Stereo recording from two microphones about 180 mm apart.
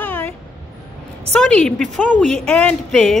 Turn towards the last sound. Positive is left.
turn(degrees=5)  # may be behind; listen again after turning